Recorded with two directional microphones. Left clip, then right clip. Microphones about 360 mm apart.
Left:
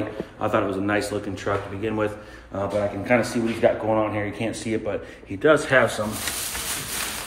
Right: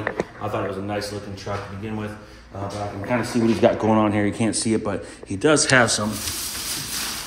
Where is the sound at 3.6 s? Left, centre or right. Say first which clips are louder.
Right 1 dB; right.